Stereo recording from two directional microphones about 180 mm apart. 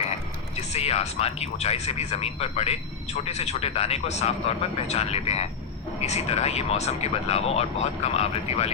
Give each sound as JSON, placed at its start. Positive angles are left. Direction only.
{"t": 0.5, "sound": "speech", "side_deg": 35}